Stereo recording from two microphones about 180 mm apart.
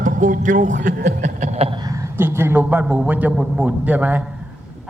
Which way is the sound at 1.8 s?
20° right (ahead or behind).